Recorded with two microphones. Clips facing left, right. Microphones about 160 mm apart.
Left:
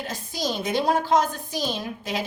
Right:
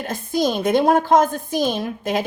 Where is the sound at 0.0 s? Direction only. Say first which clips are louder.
Right 9 dB; 55° right (ahead or behind).